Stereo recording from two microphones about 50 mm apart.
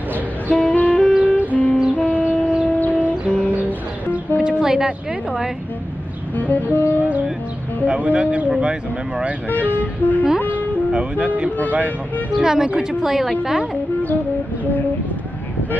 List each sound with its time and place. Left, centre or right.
0.5 s music: left
1.1 s music: right
1.5 s music: left
4.4 s a woman's voice: centre
6.3 s speech: left
6.8 s music: right
7.8 s speech: right
9.7 s speech: left
10.9 s speech: right
12.4 s a woman's voice: centre